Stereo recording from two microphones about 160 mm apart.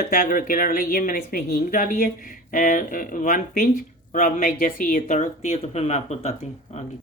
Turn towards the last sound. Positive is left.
turn(degrees=40)  # may be behind; listen again after turning